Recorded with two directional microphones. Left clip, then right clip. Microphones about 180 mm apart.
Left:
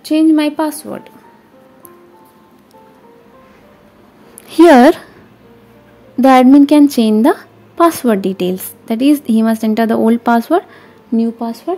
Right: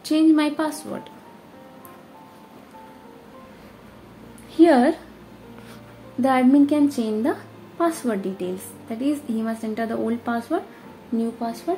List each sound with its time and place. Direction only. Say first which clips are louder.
0.0 s a woman's voice: left 7 dB; 35° left (ahead or behind)
4.5 s a sound: left 10 dB; 75° left (ahead or behind)
6.2 s a woman's voice: left 11 dB; 60° left (ahead or behind)